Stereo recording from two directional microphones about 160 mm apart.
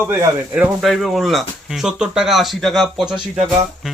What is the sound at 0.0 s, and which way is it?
Speech, 20° right (ahead or behind).